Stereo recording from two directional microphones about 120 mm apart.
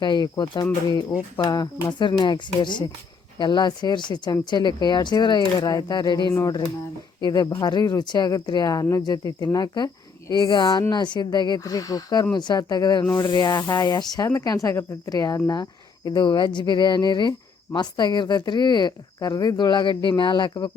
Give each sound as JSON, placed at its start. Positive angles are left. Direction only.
{"t": 0.0, "sound": "speech", "side_deg": 40}